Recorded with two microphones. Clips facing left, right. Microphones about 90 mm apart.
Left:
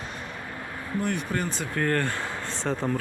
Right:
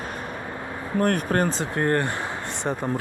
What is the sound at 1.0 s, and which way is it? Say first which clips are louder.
Speech: right 7 dB; 50° right (ahead or behind).